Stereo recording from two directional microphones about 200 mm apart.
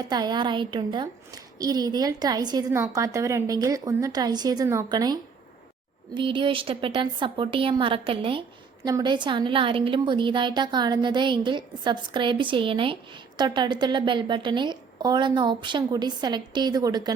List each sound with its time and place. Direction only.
0.0 s a woman's voice: 20° right (ahead or behind)